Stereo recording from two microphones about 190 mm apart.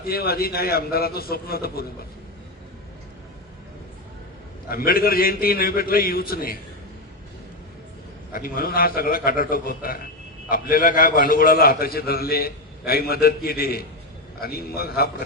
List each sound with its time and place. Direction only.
0.0 s a man's voice: 55° left (ahead or behind)
4.7 s a man's voice: 50° left (ahead or behind)
8.3 s a man's voice: 50° left (ahead or behind)